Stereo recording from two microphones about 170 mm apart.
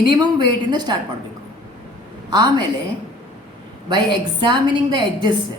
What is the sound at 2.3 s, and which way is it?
Speech, 25° right (ahead or behind).